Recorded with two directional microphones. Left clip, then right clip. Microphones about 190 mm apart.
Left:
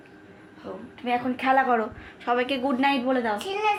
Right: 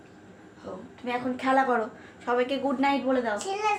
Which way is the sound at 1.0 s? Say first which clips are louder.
Left 4 dB; 45° left (ahead or behind).